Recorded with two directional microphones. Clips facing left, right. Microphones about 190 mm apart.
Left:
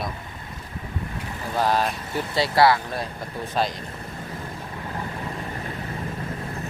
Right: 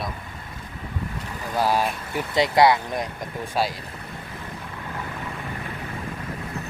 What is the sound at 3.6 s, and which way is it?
Speech, 10° right (ahead or behind).